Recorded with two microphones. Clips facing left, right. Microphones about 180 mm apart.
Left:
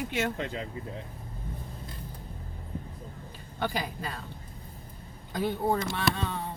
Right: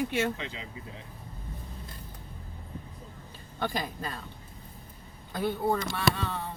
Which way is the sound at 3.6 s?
10° left (ahead or behind).